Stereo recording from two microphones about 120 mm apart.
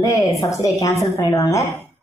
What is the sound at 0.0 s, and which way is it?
A woman's voice, 25° left (ahead or behind).